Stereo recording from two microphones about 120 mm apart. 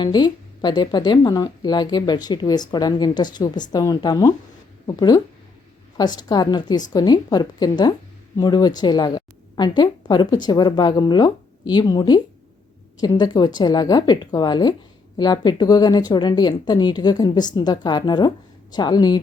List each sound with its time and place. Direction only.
0.0 s speech: 35° left (ahead or behind)